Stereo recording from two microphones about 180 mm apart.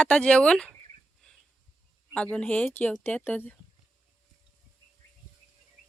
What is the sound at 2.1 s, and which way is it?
A woman's voice, 5° left (ahead or behind).